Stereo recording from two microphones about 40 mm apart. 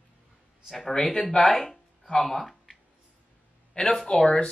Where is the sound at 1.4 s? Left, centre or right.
Centre.